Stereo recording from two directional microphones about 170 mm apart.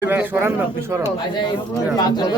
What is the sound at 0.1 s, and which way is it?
Speech, 10° right (ahead or behind).